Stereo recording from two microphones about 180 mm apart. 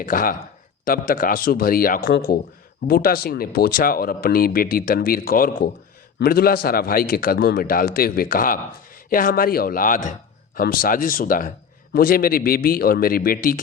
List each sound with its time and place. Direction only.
0.0 s speech: 50° left (ahead or behind)